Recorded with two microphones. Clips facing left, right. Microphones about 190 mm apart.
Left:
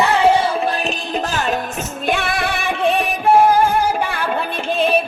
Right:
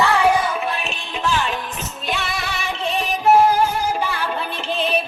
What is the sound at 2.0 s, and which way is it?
Music, 55° left (ahead or behind).